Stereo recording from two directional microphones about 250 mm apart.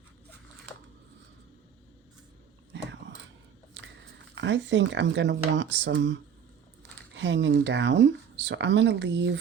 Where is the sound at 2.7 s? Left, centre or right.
Right.